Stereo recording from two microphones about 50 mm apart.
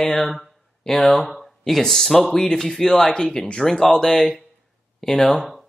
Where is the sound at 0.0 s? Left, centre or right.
Centre.